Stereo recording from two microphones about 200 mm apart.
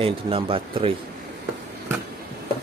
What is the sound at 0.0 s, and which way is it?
Speech, 25° right (ahead or behind).